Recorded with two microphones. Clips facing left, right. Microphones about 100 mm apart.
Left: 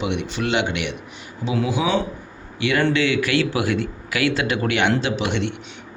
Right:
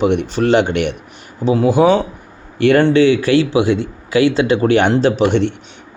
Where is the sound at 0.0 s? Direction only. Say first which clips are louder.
Right 9 dB; 40° right (ahead or behind).